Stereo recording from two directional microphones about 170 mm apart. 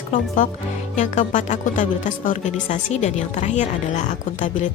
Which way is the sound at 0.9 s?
45° left (ahead or behind).